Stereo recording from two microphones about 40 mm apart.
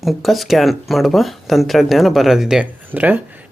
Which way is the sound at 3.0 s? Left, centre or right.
Right.